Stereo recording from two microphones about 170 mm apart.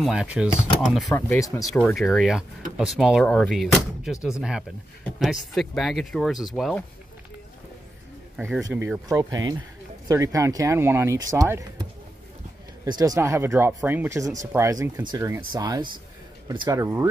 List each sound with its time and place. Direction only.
0.0 s speech: 5° right (ahead or behind)
1.1 s speech: 20° left (ahead or behind)
2.0 s speech: centre (ahead or behind)
8.7 s speech: 15° right (ahead or behind)
12.8 s speech: 25° right (ahead or behind)